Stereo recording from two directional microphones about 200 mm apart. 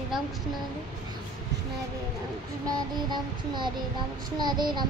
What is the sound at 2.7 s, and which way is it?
Child singing, 20° right (ahead or behind).